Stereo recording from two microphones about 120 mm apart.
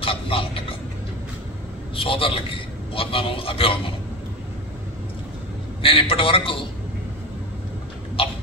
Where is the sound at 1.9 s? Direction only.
50° left (ahead or behind).